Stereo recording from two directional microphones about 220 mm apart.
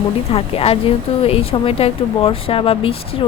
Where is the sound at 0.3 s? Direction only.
25° left (ahead or behind).